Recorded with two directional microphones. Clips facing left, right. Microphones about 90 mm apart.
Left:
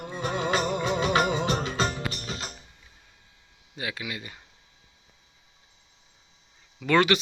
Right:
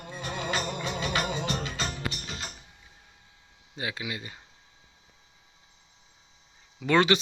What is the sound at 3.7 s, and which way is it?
Speech, 25° right (ahead or behind).